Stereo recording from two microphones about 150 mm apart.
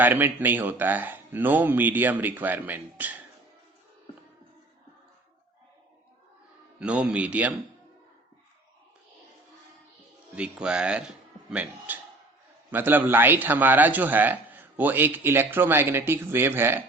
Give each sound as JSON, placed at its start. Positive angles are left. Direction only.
{"t": 0.0, "sound": "a man's voice", "side_deg": -15}
{"t": 6.7, "sound": "a man's voice", "side_deg": -10}
{"t": 10.3, "sound": "a man's voice", "side_deg": -5}